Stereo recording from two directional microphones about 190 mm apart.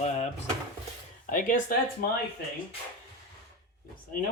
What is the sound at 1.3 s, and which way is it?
Speech, 45° left (ahead or behind).